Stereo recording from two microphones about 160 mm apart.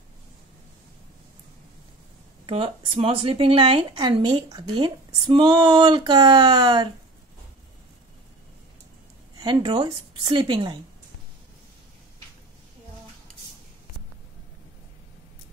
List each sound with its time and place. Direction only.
2.4 s speech: 30° right (ahead or behind)
9.4 s a woman's voice: 30° right (ahead or behind)